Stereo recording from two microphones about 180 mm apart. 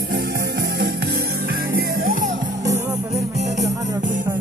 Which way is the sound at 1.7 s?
50° right (ahead or behind).